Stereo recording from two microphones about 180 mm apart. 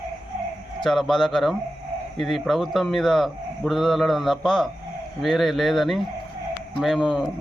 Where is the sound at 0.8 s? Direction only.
Centre (ahead or behind).